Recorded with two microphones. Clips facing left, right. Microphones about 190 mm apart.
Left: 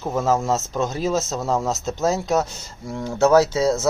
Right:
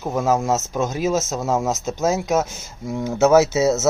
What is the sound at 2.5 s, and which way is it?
Speech, 20° right (ahead or behind).